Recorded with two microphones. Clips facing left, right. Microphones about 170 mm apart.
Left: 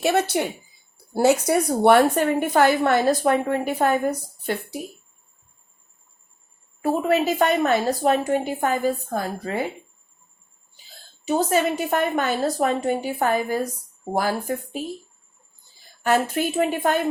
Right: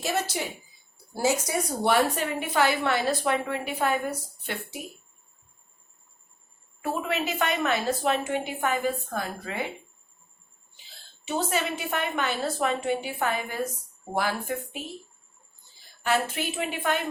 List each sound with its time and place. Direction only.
0.0 s a woman's voice: 60° left (ahead or behind); by 4.8 s 40° left (ahead or behind)
6.8 s a woman's voice: 40° left (ahead or behind)
11.3 s a woman's voice: 40° left (ahead or behind)
16.0 s a woman's voice: 40° left (ahead or behind)